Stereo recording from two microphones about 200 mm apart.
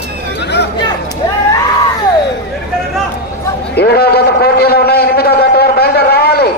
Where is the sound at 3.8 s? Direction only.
50° left (ahead or behind).